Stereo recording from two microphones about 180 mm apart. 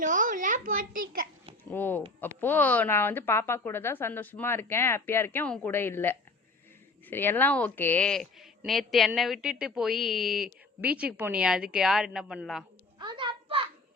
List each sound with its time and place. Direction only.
0.0 s a child's voice: 45° right (ahead or behind)
1.7 s a woman's voice: 10° left (ahead or behind)
13.0 s a sound: 25° right (ahead or behind)